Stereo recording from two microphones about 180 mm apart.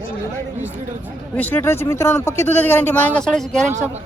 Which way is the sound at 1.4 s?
10° left (ahead or behind).